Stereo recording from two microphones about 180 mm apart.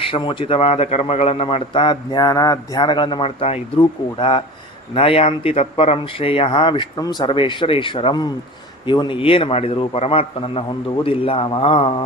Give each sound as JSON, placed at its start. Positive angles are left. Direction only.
{"t": 0.1, "sound": "a man's voice", "side_deg": 30}